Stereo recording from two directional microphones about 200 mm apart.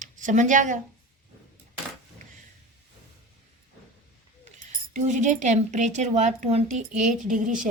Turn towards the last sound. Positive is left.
turn(degrees=-40)  # may be behind; listen again after turning